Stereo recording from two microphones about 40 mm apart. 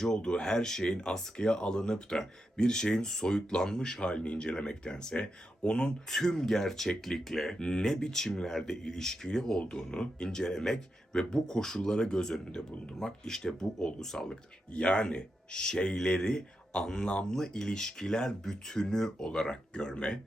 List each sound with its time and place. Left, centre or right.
0.2 s speech: centre
4.0 s speech: left; by 14.3 s centre
14.7 s speech: left